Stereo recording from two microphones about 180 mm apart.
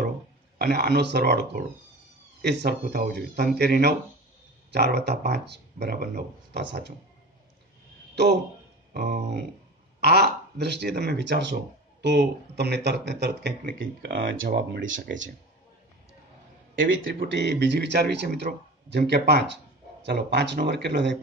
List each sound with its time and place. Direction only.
0.6 s speech: 65° right (ahead or behind)
8.9 s a man's voice: 55° right (ahead or behind); by 15.0 s 75° right (ahead or behind)
16.7 s a man's voice: 90° right
17.2 s a man's voice: 70° right (ahead or behind)